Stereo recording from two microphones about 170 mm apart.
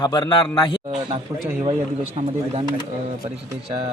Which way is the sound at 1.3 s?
15° right (ahead or behind).